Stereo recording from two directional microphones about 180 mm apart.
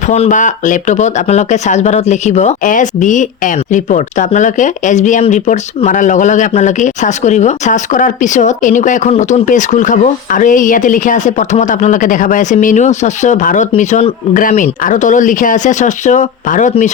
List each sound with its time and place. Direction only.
0.1 s speech: 45° left (ahead or behind)